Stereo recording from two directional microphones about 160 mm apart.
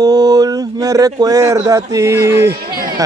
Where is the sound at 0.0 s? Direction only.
25° right (ahead or behind).